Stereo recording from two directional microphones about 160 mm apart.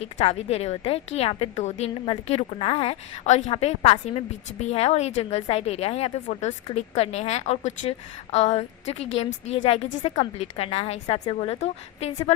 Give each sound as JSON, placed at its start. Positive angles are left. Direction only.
{"t": 0.0, "sound": "a woman's voice", "side_deg": 40}